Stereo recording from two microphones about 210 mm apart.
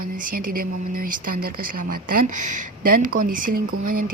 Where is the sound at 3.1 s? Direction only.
40° right (ahead or behind).